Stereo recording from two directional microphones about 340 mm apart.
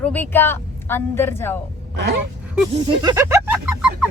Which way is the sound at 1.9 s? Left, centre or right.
Right.